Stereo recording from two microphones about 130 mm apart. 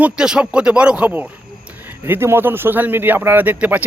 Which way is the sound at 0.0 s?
5° right (ahead or behind).